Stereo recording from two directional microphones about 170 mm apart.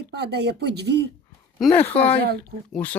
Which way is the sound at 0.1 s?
75° right (ahead or behind).